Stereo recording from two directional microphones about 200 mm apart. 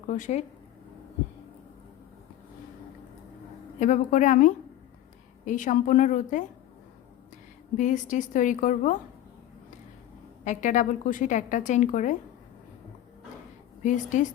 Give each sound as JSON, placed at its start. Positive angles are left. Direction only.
{"t": 0.1, "sound": "speech", "side_deg": 35}
{"t": 3.8, "sound": "speech", "side_deg": 40}
{"t": 7.8, "sound": "speech", "side_deg": 40}
{"t": 10.4, "sound": "speech", "side_deg": 40}
{"t": 13.8, "sound": "speech", "side_deg": 40}